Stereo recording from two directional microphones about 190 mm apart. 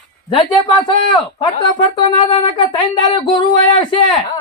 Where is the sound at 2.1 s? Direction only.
25° left (ahead or behind).